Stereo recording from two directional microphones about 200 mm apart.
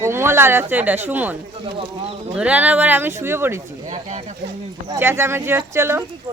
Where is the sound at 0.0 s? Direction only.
10° right (ahead or behind).